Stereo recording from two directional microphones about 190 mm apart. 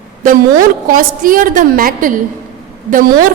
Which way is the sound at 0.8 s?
45° right (ahead or behind).